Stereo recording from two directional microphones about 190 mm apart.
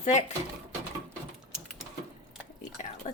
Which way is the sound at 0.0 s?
35° left (ahead or behind).